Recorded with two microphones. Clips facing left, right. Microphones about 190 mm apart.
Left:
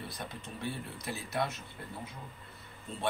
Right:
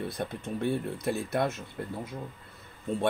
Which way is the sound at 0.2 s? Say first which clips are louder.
Right 8 dB; 55° right (ahead or behind).